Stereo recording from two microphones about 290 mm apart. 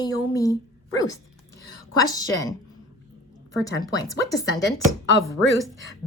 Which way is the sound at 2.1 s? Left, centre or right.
Centre.